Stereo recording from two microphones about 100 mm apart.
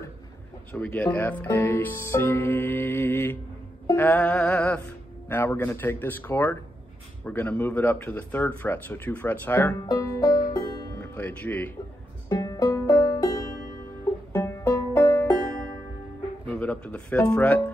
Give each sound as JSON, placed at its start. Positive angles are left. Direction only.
{"t": 0.7, "sound": "speech", "side_deg": 15}
{"t": 3.9, "sound": "music", "side_deg": 15}
{"t": 5.3, "sound": "speech", "side_deg": 20}
{"t": 9.8, "sound": "speech", "side_deg": 30}
{"t": 10.5, "sound": "music", "side_deg": 45}
{"t": 11.0, "sound": "speech", "side_deg": 20}
{"t": 12.4, "sound": "music", "side_deg": 35}
{"t": 14.3, "sound": "music", "side_deg": 20}
{"t": 16.4, "sound": "speech", "side_deg": 15}